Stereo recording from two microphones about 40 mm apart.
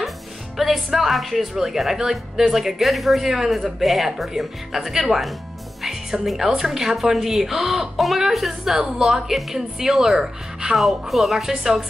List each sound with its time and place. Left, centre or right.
0.6 s a woman's voice: centre
8.7 s a woman's voice: right
9.0 s a woman's voice: centre
10.8 s speech: centre